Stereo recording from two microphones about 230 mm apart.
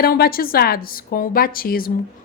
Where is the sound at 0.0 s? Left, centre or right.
Left.